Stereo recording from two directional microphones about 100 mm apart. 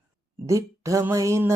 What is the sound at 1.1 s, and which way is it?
Mantra, 30° right (ahead or behind).